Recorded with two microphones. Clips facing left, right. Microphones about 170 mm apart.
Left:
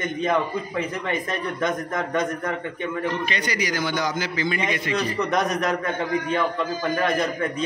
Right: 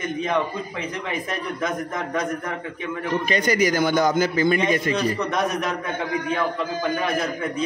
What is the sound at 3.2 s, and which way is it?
A man's voice, 45° right (ahead or behind).